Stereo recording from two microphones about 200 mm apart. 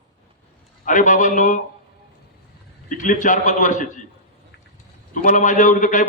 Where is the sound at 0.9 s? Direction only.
40° left (ahead or behind).